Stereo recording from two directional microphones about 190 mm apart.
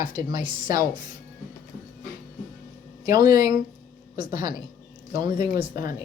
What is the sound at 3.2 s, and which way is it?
A man's voice, 20° right (ahead or behind).